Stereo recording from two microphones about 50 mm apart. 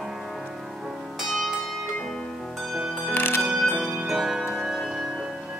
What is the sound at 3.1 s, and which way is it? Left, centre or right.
Music, left.